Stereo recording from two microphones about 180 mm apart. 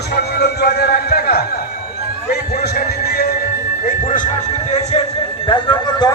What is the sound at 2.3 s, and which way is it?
Music, 60° left (ahead or behind).